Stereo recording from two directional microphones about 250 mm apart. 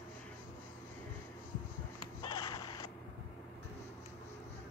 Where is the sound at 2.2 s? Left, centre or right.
Centre.